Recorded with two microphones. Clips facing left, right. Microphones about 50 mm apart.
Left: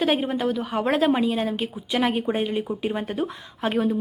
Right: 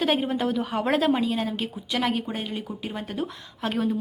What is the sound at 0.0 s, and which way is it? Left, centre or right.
Speech, centre.